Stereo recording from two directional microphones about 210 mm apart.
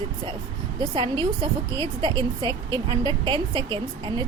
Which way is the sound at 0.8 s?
25° right (ahead or behind).